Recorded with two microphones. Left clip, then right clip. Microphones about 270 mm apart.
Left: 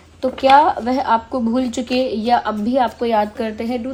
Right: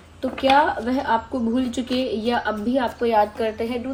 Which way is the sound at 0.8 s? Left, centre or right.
Left.